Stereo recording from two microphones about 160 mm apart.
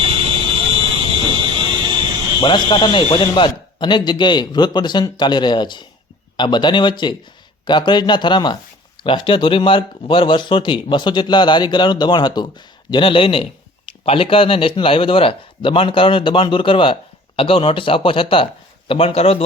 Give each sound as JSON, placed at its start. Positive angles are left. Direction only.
{"t": 0.0, "sound": "fire alarm", "side_deg": -35}
{"t": 2.4, "sound": "speech", "side_deg": 30}